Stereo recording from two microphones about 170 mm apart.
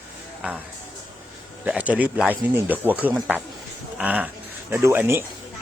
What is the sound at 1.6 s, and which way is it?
Speech, 10° right (ahead or behind).